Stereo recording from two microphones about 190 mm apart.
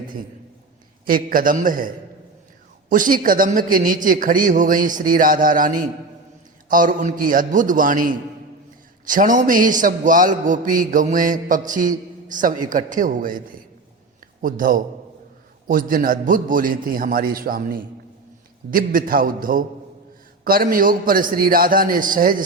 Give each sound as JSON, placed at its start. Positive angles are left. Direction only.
{"t": 1.0, "sound": "a man's voice", "side_deg": -50}
{"t": 2.9, "sound": "a man's voice", "side_deg": -45}
{"t": 14.4, "sound": "a man's voice", "side_deg": -45}